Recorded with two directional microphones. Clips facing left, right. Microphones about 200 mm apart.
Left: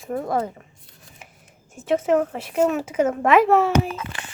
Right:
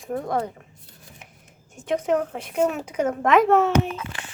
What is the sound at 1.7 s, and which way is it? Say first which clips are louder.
Speech: left 3 dB; 5° left (ahead or behind).